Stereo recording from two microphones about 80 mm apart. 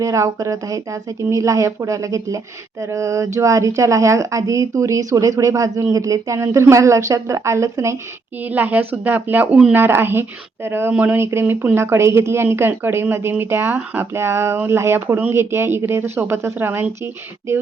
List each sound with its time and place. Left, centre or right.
0.0 s speech: right
8.4 s speech: right
11.2 s speech: right